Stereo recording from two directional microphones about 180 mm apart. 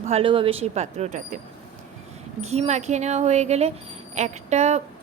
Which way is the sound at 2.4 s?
35° right (ahead or behind).